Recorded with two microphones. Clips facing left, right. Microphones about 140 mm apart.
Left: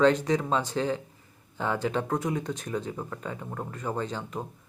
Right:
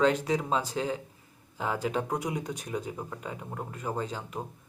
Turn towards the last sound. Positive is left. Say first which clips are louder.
# left 2 dB
turn(degrees=-5)  # may be behind; listen again after turning